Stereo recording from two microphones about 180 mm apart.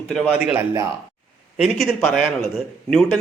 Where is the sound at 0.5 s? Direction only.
15° right (ahead or behind).